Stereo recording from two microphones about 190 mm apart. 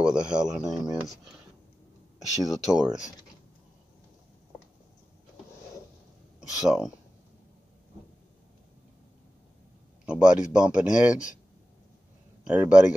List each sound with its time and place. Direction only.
0.0 s speech: 5° right (ahead or behind)
2.1 s a sound: 20° right (ahead or behind)
2.4 s speech: 5° right (ahead or behind)
6.6 s speech: centre (ahead or behind)
10.0 s speech: 5° right (ahead or behind)
10.9 s speech: 40° left (ahead or behind)
12.4 s speech: 5° right (ahead or behind)